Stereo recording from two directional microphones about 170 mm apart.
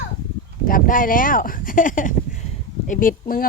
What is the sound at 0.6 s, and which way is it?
Speech, 55° left (ahead or behind).